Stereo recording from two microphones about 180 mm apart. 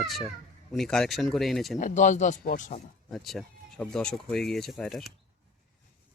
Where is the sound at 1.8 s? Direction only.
45° left (ahead or behind).